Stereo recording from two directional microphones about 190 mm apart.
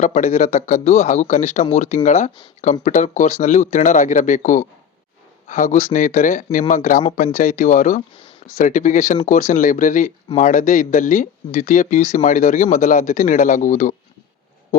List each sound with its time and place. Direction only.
0.0 s speech: 35° left (ahead or behind)